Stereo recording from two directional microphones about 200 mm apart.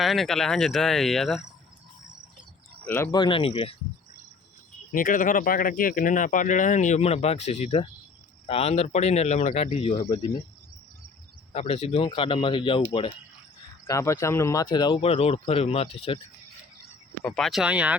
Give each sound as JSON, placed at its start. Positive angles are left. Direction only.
{"t": 0.0, "sound": "speech", "side_deg": 0}
{"t": 2.8, "sound": "speech", "side_deg": 10}
{"t": 4.9, "sound": "speech", "side_deg": 40}
{"t": 11.5, "sound": "speech", "side_deg": 30}
{"t": 13.8, "sound": "speech", "side_deg": 15}
{"t": 17.2, "sound": "speech", "side_deg": 5}